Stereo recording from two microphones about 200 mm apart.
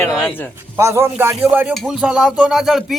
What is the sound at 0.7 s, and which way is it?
Speech, 15° right (ahead or behind).